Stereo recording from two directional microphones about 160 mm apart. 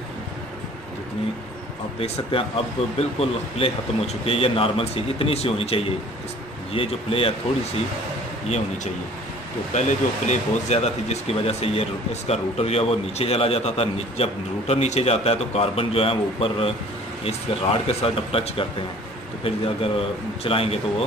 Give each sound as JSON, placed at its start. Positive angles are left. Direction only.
{"t": 2.0, "sound": "speech", "side_deg": 35}
{"t": 9.8, "sound": "speech", "side_deg": 50}